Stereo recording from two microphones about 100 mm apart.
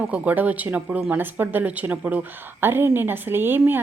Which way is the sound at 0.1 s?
15° right (ahead or behind).